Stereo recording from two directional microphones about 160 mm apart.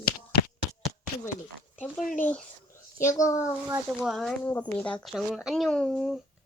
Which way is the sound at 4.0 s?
Centre (ahead or behind).